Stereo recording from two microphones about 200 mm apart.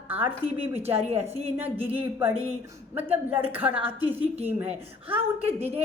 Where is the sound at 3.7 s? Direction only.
25° right (ahead or behind).